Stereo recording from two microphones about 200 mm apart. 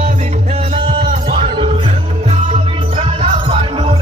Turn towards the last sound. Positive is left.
turn(degrees=-30)  # may be behind; listen again after turning